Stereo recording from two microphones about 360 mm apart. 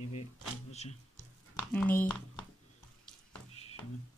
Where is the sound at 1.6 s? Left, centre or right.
Centre.